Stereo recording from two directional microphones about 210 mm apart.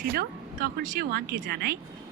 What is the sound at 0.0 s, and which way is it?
Speech, 45° right (ahead or behind).